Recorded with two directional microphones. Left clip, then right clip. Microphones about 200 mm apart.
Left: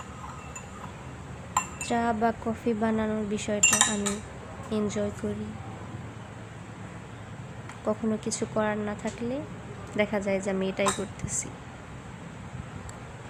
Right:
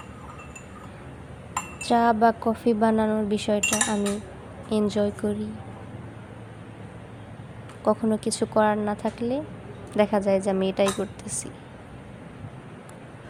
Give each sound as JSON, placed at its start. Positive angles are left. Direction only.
{"t": 1.9, "sound": "speech", "side_deg": -25}
{"t": 3.7, "sound": "cutlery", "side_deg": 0}
{"t": 4.7, "sound": "speech", "side_deg": -25}
{"t": 7.9, "sound": "speech", "side_deg": -25}